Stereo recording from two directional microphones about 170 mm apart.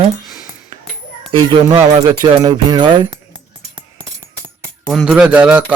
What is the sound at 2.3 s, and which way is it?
Speech, 25° right (ahead or behind).